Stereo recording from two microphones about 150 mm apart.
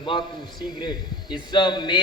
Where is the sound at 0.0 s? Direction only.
30° left (ahead or behind).